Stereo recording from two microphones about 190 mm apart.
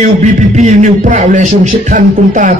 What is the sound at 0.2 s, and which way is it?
A man's voice, 40° right (ahead or behind).